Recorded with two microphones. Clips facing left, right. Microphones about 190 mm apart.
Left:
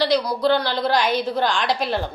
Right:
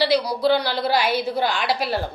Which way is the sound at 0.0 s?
10° right (ahead or behind).